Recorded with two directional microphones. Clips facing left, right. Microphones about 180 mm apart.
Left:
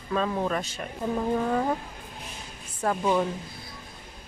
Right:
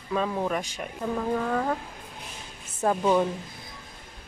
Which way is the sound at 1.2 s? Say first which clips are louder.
Left 1 dB; 15° left (ahead or behind).